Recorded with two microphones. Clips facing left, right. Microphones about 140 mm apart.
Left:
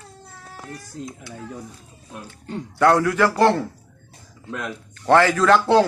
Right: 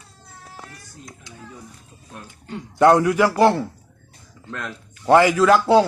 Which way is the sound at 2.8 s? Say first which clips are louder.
Right 2 dB; 20° right (ahead or behind).